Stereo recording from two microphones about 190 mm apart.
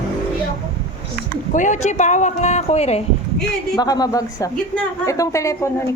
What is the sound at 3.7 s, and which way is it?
Speech, 20° left (ahead or behind).